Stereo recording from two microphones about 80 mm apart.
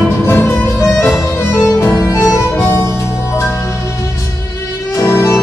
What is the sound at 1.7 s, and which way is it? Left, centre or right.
Harmonica, left.